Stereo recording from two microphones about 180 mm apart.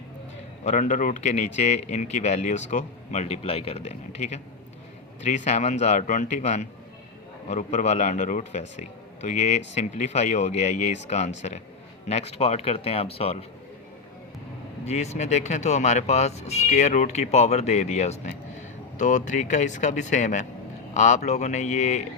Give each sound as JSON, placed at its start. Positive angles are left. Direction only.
{"t": 0.6, "sound": "a man's voice", "side_deg": 40}
{"t": 14.8, "sound": "a man's voice", "side_deg": 40}